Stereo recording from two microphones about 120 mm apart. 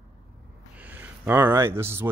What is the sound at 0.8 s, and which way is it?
Speech, 15° right (ahead or behind).